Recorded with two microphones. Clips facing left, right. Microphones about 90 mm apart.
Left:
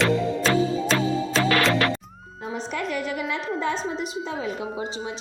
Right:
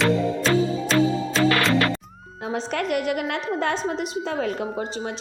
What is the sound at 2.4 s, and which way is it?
A woman's voice, 85° right.